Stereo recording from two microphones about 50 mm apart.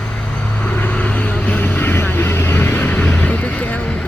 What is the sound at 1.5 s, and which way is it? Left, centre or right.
Vehicle, left.